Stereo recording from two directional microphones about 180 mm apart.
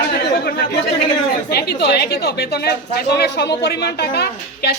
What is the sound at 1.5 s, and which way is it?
A woman's voice, 65° left (ahead or behind).